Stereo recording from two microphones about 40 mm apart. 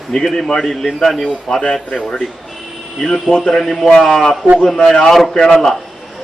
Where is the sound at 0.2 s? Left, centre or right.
Centre.